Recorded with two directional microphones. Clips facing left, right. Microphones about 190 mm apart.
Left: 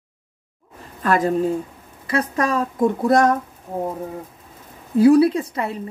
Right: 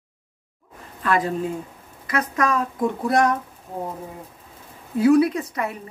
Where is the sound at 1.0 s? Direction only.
40° left (ahead or behind).